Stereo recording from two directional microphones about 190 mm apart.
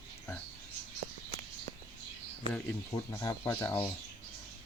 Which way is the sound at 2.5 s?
15° left (ahead or behind).